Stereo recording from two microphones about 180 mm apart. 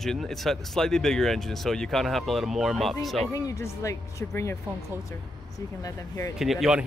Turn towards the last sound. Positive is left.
turn(degrees=-5)  # may be behind; listen again after turning